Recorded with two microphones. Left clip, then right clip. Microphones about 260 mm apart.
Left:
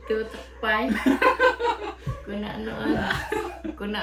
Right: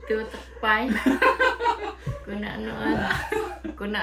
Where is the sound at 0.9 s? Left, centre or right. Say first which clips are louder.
Even; centre.